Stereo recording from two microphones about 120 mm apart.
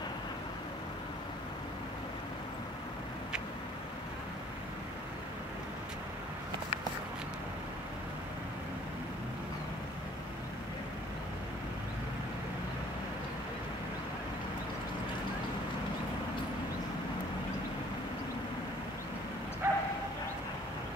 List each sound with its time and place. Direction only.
19.6 s bow-wow: 20° right (ahead or behind)